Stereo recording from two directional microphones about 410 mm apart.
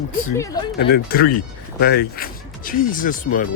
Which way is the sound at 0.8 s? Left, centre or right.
Left.